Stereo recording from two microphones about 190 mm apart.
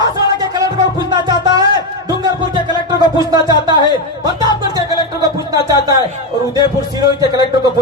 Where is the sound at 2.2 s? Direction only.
20° right (ahead or behind).